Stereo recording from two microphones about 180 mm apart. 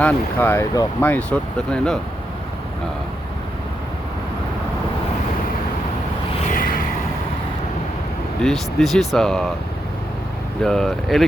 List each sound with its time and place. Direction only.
0.0 s speech: 10° left (ahead or behind)
6.4 s a sound: 50° left (ahead or behind)
8.4 s speech: centre (ahead or behind)
10.6 s speech: centre (ahead or behind)